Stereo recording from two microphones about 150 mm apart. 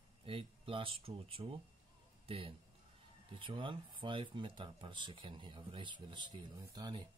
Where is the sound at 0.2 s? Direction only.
35° right (ahead or behind).